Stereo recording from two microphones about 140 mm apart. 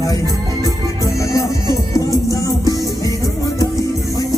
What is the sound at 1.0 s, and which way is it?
Music, 25° left (ahead or behind).